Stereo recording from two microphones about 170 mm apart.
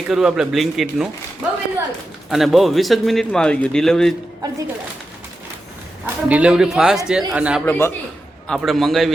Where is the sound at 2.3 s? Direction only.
Centre (ahead or behind).